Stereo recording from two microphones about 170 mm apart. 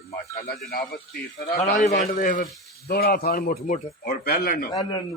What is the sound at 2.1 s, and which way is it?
Speech, 55° left (ahead or behind).